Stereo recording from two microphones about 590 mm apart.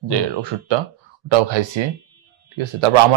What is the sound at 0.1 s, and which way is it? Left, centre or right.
Speech, right.